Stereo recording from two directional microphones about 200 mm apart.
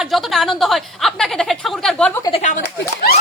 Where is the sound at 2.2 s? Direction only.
30° left (ahead or behind).